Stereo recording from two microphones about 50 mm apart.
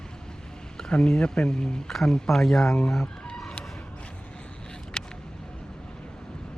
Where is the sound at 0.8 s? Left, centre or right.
Centre.